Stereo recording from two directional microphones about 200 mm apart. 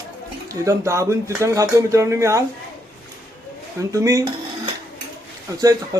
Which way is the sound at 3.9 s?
15° right (ahead or behind).